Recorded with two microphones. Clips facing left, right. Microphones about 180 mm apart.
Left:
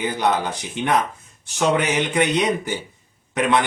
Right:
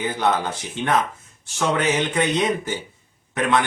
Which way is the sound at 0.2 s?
15° left (ahead or behind).